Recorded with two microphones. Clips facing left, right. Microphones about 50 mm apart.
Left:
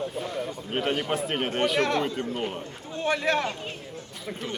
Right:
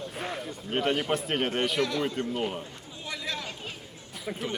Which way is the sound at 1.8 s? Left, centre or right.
Left.